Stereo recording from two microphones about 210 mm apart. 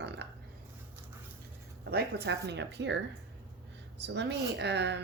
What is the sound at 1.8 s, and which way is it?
Speech, 50° right (ahead or behind).